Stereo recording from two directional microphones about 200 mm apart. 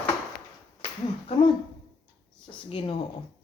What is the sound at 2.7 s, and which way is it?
Speech, 25° left (ahead or behind).